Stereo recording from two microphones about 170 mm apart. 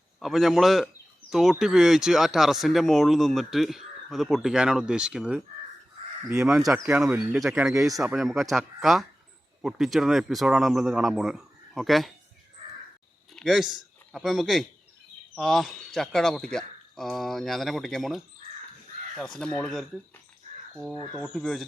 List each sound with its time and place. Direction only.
0.2 s speech: centre (ahead or behind)
7.9 s speech: 20° right (ahead or behind)
8.1 s speech: centre (ahead or behind)
13.3 s speech: centre (ahead or behind)
21.0 s speech: 5° left (ahead or behind)